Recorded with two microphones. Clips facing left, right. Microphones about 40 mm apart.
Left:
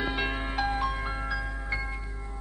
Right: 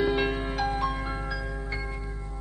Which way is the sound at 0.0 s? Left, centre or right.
Centre.